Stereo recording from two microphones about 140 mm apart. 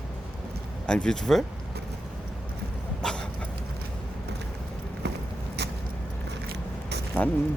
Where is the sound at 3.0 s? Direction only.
5° left (ahead or behind).